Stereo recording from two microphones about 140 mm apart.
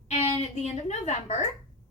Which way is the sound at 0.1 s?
50° left (ahead or behind).